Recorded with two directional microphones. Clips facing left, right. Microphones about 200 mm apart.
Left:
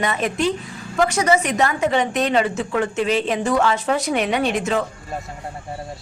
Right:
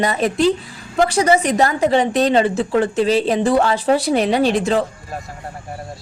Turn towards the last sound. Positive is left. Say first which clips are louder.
# right 4 dB
turn(degrees=-35)  # may be behind; listen again after turning